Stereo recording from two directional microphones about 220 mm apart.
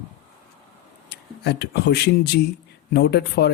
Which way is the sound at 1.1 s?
50° left (ahead or behind).